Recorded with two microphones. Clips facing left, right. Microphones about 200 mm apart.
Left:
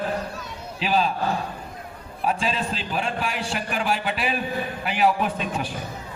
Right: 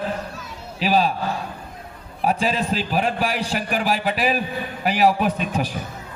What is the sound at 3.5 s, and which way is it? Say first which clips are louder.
Speech: right 4 dB; 50° right (ahead or behind).